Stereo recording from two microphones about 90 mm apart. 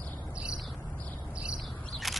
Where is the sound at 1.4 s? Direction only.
5° right (ahead or behind).